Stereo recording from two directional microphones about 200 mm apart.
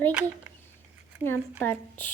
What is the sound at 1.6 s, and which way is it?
Speech, 10° left (ahead or behind).